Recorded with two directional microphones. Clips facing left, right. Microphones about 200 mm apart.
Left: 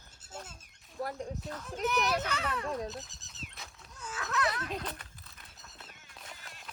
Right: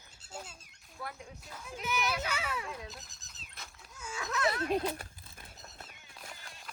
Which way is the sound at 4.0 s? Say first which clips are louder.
Even; 10° right (ahead or behind).